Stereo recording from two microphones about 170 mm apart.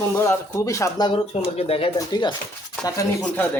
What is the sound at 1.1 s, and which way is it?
Speech, 35° left (ahead or behind).